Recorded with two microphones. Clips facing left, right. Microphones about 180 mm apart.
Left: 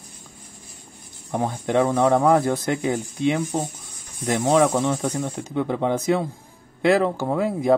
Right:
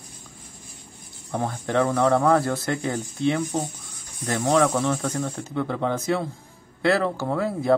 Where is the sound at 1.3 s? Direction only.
15° left (ahead or behind).